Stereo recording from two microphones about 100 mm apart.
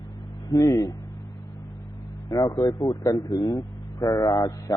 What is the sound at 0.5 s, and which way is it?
Speech, 35° left (ahead or behind).